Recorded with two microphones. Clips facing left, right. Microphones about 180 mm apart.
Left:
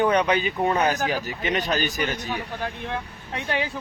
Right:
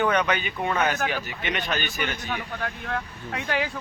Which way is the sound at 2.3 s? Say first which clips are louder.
Left 1 dB; 25° left (ahead or behind).